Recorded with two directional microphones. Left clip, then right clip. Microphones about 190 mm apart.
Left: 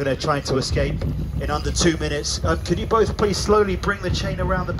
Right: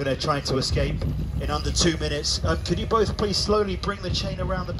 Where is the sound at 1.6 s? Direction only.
30° left (ahead or behind).